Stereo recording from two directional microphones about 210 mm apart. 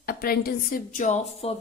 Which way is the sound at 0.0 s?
45° left (ahead or behind).